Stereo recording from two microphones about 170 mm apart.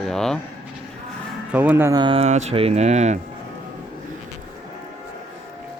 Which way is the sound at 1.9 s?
30° right (ahead or behind).